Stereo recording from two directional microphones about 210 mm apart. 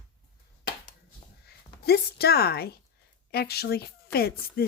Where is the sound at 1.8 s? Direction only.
50° left (ahead or behind).